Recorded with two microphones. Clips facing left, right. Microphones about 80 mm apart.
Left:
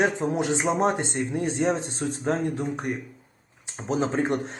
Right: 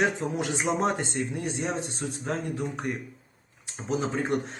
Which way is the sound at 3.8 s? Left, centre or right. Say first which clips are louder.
Left 3 dB; left.